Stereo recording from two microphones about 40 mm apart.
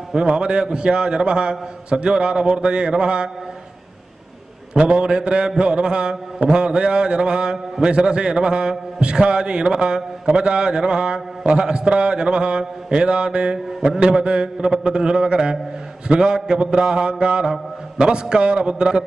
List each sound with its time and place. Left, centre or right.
0.1 s mantra: right
4.7 s mantra: right
17.9 s a man's voice: right
18.3 s mantra: right